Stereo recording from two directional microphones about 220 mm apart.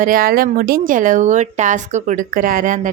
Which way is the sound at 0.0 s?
40° right (ahead or behind).